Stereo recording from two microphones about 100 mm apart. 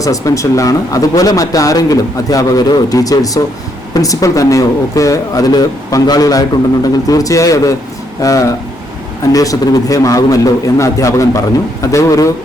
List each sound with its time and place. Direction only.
0.0 s speech: 35° left (ahead or behind)